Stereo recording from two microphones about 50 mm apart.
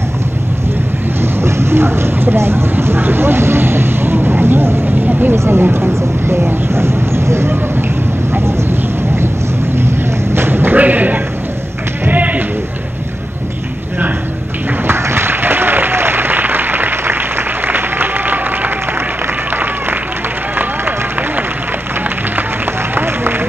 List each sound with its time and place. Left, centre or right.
1.2 s vehicle: right
5.0 s vehicle: right
5.3 s speech: right
9.8 s a sound: right
12.0 s sheep: right
14.9 s applause: right
19.5 s a sound: right
20.5 s run: right
22.9 s a sound: right